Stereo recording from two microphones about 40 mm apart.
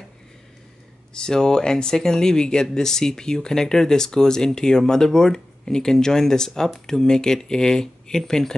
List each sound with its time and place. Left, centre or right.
1.1 s speech: centre